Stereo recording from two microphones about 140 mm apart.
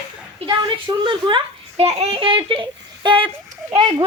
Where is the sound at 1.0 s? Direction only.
35° right (ahead or behind).